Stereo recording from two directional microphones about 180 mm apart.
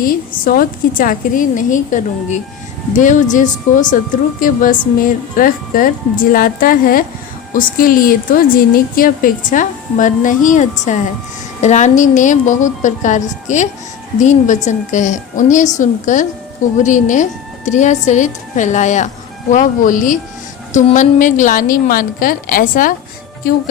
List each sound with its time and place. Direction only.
0.0 s a woman's voice: 50° left (ahead or behind)